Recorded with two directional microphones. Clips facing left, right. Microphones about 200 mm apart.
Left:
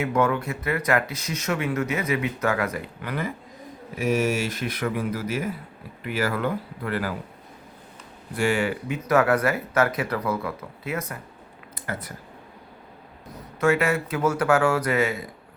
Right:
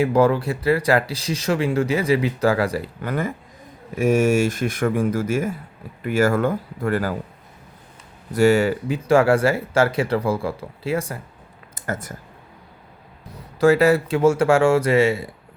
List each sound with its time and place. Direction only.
0.0 s a man's voice: 30° right (ahead or behind)
8.3 s speech: 40° right (ahead or behind)
9.0 s speech: 30° right (ahead or behind)
11.7 s a sound: 45° right (ahead or behind)
13.6 s speech: 35° right (ahead or behind)